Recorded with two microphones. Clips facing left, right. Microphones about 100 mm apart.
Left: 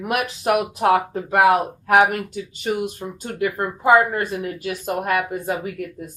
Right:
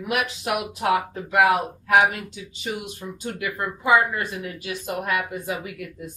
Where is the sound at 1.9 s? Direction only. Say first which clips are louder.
Left 3 dB; 50° left (ahead or behind).